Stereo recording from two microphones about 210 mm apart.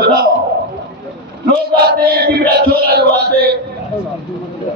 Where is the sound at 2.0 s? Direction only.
45° right (ahead or behind).